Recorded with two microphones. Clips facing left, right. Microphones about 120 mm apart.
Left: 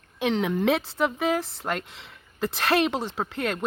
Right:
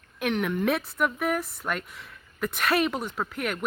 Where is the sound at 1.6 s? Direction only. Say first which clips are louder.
Left 2 dB; 80° left.